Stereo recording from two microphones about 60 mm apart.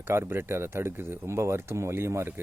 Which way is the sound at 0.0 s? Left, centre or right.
Right.